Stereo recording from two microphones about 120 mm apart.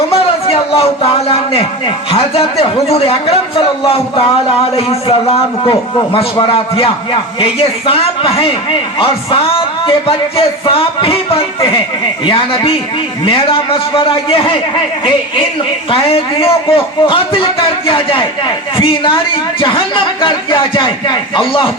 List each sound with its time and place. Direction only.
0.1 s a man's voice: 55° left (ahead or behind)
15.9 s a man's voice: 50° left (ahead or behind)